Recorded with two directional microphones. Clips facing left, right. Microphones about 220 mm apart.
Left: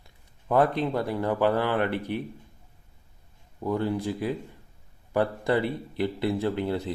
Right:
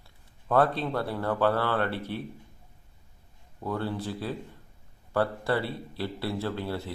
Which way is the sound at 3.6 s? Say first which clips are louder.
Left 5 dB; 15° left (ahead or behind).